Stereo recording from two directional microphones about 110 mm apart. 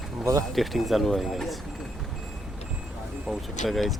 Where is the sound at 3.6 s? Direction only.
Centre (ahead or behind).